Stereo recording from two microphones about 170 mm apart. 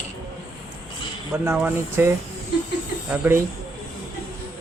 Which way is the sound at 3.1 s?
15° right (ahead or behind).